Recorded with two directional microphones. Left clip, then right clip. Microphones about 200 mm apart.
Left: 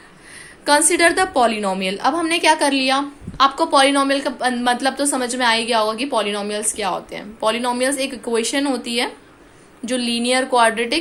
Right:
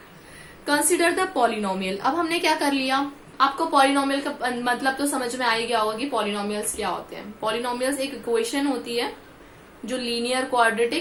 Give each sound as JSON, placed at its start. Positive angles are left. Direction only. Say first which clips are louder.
{"t": 0.6, "sound": "a woman's voice", "louder": "left 6 dB", "side_deg": 45}